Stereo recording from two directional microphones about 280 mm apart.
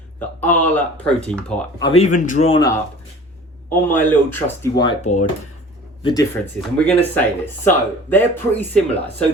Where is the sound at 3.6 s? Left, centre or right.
Centre.